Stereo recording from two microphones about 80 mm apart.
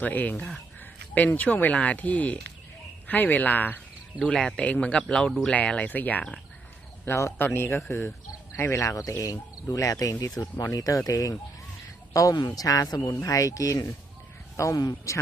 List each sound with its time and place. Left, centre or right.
0.0 s speech: left
4.2 s speech: centre
7.0 s a man's voice: left